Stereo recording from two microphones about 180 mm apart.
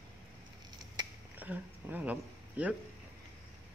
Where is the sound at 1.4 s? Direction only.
10° right (ahead or behind).